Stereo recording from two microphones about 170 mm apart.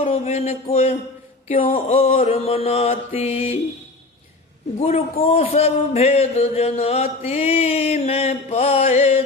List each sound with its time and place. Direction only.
0.0 s a man's voice: 40° left (ahead or behind)
4.8 s a man's voice: 40° left (ahead or behind)